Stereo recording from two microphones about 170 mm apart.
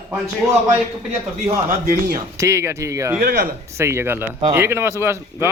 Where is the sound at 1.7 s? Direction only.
55° right (ahead or behind).